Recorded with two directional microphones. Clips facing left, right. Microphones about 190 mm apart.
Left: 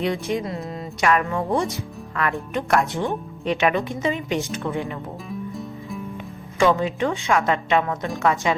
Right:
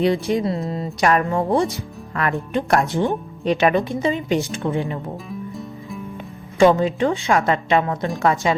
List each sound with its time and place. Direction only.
0.0 s speech: 35° right (ahead or behind)
5.3 s music: centre (ahead or behind)
6.1 s a woman's voice: 35° right (ahead or behind)